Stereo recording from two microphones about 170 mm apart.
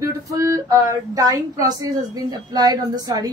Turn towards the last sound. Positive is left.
turn(degrees=-25)  # may be behind; listen again after turning